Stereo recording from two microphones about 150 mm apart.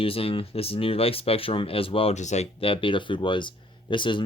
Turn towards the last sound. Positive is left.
turn(degrees=35)  # may be behind; listen again after turning